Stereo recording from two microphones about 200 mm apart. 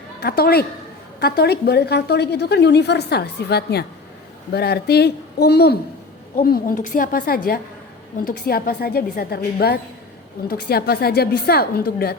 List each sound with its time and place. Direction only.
0.2 s a woman's voice: 50° left (ahead or behind)